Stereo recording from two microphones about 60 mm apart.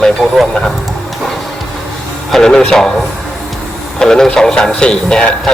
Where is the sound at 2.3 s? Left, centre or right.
Centre.